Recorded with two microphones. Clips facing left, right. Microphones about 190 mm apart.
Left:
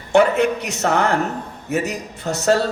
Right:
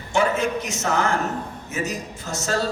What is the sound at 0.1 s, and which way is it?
A man's voice, 65° left (ahead or behind).